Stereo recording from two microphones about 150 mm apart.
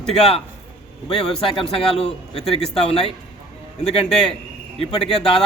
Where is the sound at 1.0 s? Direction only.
35° left (ahead or behind).